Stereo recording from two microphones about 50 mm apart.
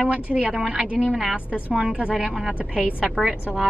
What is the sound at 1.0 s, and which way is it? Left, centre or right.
Speech, centre.